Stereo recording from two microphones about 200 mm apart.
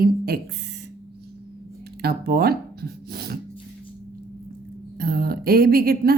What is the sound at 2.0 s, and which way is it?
Speech, 50° right (ahead or behind).